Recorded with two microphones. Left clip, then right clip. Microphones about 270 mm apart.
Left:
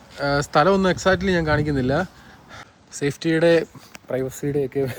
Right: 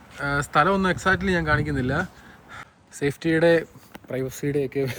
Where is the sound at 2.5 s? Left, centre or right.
Centre.